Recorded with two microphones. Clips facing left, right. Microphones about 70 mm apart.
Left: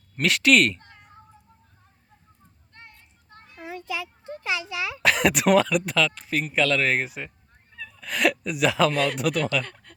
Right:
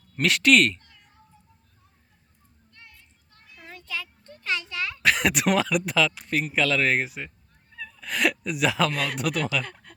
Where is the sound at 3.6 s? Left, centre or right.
Centre.